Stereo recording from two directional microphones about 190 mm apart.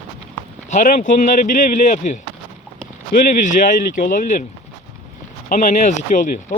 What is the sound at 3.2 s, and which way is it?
Speech, 40° left (ahead or behind).